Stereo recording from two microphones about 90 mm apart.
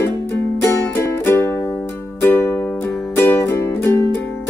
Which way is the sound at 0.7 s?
25° left (ahead or behind).